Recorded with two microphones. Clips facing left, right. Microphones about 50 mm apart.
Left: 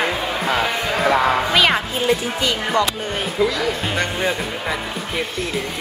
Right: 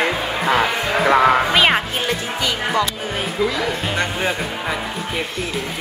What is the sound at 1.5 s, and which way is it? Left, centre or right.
Speech, centre.